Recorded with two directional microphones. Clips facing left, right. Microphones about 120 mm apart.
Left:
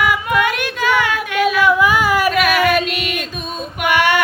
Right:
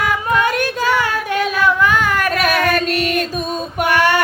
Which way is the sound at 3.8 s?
40° right (ahead or behind).